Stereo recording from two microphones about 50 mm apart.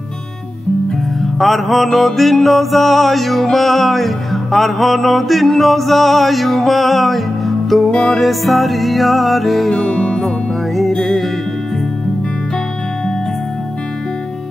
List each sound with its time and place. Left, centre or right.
1.2 s mantra: centre
10.8 s music: centre